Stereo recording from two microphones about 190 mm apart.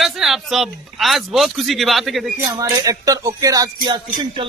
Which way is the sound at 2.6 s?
20° right (ahead or behind).